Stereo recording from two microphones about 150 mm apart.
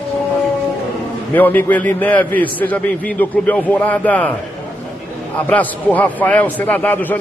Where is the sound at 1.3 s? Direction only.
10° left (ahead or behind).